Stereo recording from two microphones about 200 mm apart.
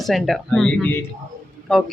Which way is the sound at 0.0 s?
Centre (ahead or behind).